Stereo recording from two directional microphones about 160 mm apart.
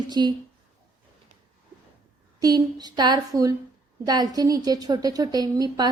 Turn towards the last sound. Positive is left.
turn(degrees=-25)  # may be behind; listen again after turning